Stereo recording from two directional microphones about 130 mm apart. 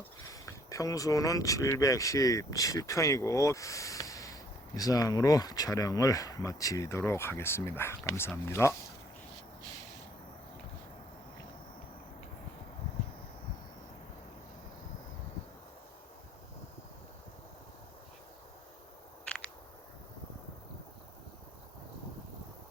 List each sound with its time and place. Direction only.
0.3 s speech: 25° left (ahead or behind)